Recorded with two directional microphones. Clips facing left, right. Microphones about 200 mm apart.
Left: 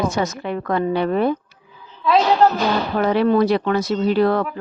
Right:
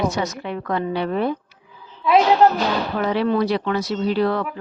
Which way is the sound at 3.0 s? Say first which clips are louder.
Left 4 dB; 50° left (ahead or behind).